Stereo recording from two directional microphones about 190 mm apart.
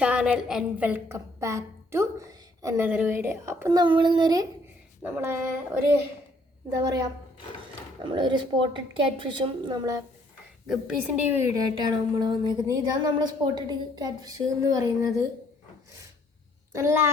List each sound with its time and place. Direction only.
0.0 s a woman's voice: 5° right (ahead or behind)
8.1 s a woman's voice: 25° right (ahead or behind)
11.3 s a woman's voice: 20° right (ahead or behind)
16.7 s a woman's voice: 15° right (ahead or behind)